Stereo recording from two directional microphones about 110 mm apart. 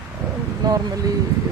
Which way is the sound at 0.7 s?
35° right (ahead or behind).